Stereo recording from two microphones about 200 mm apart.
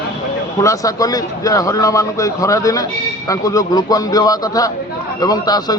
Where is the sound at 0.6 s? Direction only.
15° left (ahead or behind).